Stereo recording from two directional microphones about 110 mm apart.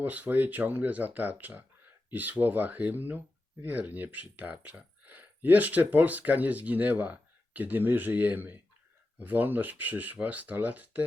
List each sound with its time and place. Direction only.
0.0 s speech: 15° right (ahead or behind)